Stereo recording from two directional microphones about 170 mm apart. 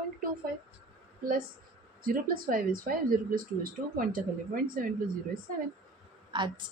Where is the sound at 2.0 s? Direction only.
55° right (ahead or behind).